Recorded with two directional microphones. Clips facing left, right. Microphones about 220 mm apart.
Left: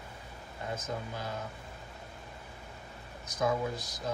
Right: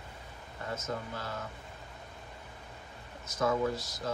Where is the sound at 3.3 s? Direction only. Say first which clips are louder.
Right 1 dB; 15° left (ahead or behind).